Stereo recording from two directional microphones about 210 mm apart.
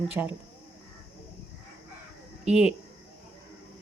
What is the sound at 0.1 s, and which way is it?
Speech, 10° right (ahead or behind).